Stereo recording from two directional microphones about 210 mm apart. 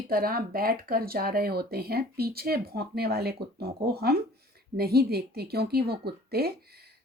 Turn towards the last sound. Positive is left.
turn(degrees=-50)  # may be behind; listen again after turning